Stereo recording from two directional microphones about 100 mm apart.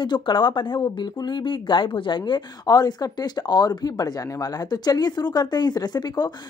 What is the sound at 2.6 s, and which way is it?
Speech, 40° left (ahead or behind).